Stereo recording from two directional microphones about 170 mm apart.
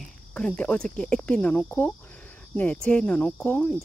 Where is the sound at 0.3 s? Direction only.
5° left (ahead or behind).